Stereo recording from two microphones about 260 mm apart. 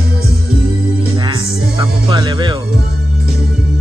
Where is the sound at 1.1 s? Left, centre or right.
Centre.